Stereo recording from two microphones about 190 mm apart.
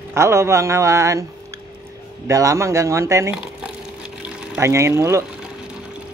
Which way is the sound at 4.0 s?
10° right (ahead or behind).